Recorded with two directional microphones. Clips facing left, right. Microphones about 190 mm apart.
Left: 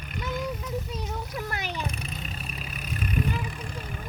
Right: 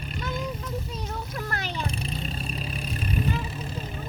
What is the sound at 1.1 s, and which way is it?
Splash, 10° left (ahead or behind).